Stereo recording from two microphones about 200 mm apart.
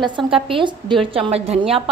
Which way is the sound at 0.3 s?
25° right (ahead or behind).